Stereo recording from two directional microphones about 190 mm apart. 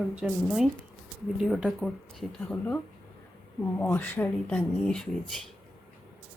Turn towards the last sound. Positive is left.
turn(degrees=0)  # may be behind; listen again after turning